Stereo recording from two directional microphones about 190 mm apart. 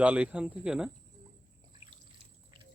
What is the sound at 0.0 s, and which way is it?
Speech, 5° right (ahead or behind).